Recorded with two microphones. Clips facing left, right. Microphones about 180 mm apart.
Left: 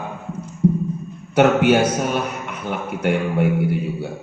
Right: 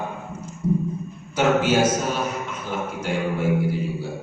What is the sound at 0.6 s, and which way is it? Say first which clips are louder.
Music: left 5 dB; 60° left (ahead or behind).